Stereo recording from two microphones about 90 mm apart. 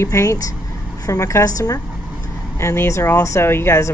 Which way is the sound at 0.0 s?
35° left (ahead or behind).